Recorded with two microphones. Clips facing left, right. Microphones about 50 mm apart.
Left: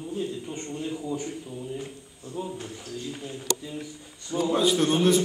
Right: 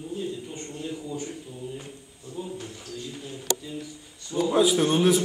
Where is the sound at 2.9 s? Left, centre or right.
Left.